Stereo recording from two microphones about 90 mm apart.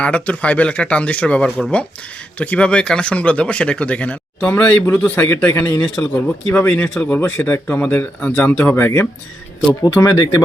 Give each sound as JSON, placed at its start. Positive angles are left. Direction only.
{"t": 0.0, "sound": "speech", "side_deg": 15}
{"t": 4.5, "sound": "speech", "side_deg": 25}
{"t": 5.5, "sound": "speech", "side_deg": 35}
{"t": 6.0, "sound": "speech", "side_deg": 20}
{"t": 9.8, "sound": "speech", "side_deg": 45}